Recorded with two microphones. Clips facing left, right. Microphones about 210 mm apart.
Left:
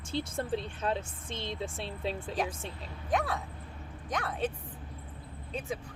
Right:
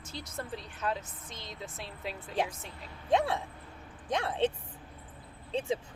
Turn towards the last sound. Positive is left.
turn(degrees=-25)  # may be behind; listen again after turning